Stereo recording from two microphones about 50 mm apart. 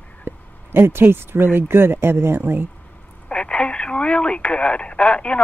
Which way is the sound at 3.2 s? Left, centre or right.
Centre.